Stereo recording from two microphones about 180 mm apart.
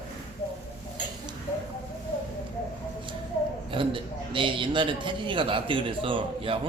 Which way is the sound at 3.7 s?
30° right (ahead or behind).